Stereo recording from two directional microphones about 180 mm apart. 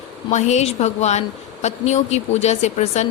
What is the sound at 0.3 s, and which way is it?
A woman's voice, 40° left (ahead or behind).